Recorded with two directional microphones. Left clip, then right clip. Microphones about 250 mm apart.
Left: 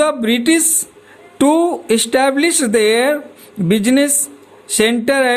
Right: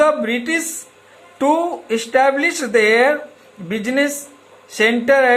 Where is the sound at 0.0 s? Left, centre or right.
Left.